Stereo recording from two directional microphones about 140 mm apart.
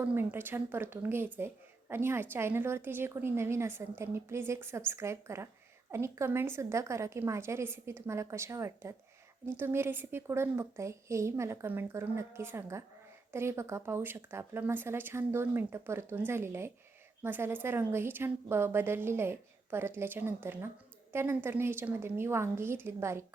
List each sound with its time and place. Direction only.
0.0 s a woman's voice: 15° right (ahead or behind)